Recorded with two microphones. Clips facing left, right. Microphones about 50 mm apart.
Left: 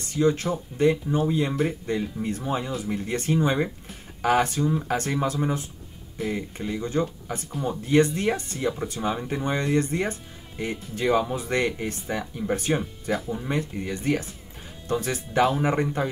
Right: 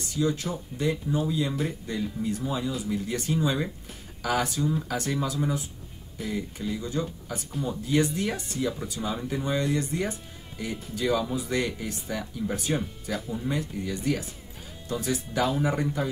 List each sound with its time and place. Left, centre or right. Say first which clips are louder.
0.0 s speech: left 5 dB; left